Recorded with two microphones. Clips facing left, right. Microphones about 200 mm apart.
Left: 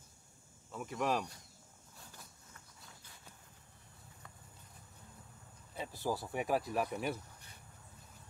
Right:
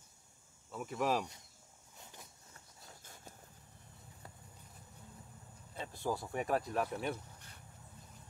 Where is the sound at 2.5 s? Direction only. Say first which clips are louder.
Right 2 dB; 45° right (ahead or behind).